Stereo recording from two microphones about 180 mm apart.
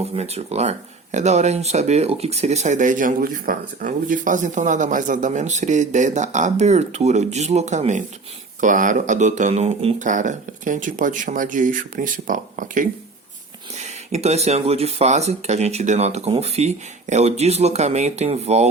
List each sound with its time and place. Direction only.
0.0 s speech: 35° right (ahead or behind)